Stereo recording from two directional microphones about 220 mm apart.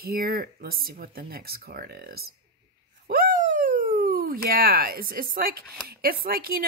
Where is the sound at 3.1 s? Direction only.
40° right (ahead or behind).